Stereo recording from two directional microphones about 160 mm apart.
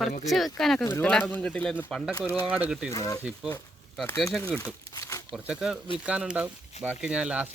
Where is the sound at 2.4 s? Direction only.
10° right (ahead or behind).